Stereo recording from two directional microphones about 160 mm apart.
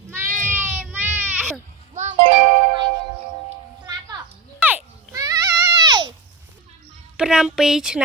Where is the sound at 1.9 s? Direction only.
45° right (ahead or behind).